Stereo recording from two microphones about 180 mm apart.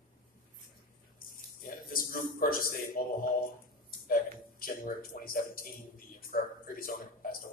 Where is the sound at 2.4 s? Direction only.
55° left (ahead or behind).